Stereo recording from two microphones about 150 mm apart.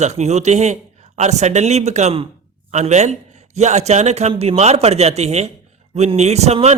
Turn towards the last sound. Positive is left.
turn(degrees=-45)  # may be behind; listen again after turning